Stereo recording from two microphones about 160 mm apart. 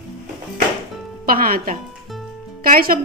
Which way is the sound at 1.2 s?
65° right (ahead or behind).